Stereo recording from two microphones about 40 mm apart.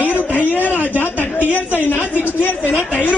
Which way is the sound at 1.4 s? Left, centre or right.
Right.